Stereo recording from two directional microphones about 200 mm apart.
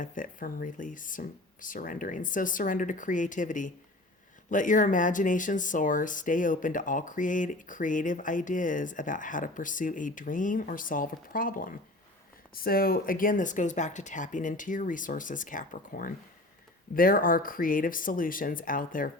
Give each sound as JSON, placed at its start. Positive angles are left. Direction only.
{"t": 0.0, "sound": "speech", "side_deg": 40}